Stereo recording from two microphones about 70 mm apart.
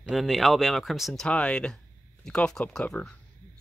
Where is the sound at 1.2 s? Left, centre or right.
Centre.